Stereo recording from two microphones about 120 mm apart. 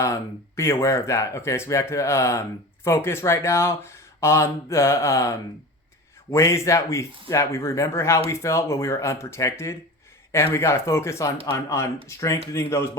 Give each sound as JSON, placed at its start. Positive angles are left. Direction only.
{"t": 0.0, "sound": "speech", "side_deg": 25}